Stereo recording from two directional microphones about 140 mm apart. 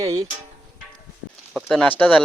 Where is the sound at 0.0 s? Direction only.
25° right (ahead or behind).